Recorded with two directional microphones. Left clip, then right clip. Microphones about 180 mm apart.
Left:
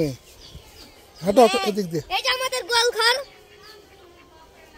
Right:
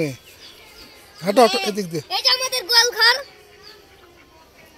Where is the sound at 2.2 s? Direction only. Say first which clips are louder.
Right 7 dB; 30° left (ahead or behind); by 3.2 s 60° left (ahead or behind).